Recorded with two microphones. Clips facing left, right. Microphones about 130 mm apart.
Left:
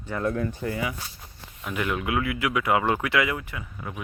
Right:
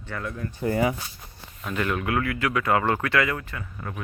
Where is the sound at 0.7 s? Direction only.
40° right (ahead or behind).